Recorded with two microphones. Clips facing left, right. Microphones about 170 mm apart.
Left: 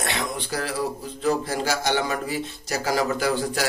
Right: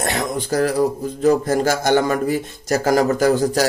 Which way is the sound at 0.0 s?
45° right (ahead or behind).